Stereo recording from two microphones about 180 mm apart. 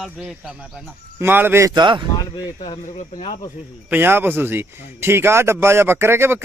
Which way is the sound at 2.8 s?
40° left (ahead or behind).